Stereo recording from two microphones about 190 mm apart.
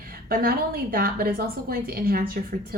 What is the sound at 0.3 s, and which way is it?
Speech, 50° right (ahead or behind).